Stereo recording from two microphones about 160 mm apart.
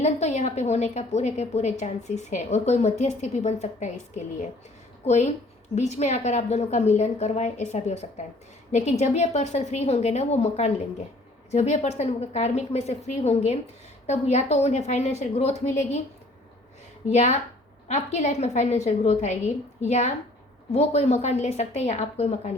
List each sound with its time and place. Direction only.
0.0 s a woman's voice: 45° left (ahead or behind)
17.1 s a woman's voice: 45° left (ahead or behind)